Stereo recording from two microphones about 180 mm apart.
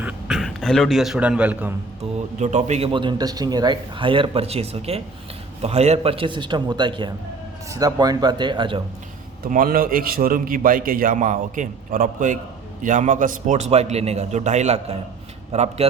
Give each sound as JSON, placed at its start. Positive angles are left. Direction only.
{"t": 0.0, "sound": "a man's voice", "side_deg": 0}
{"t": 2.4, "sound": "a man's voice", "side_deg": -40}
{"t": 9.4, "sound": "a man's voice", "side_deg": -50}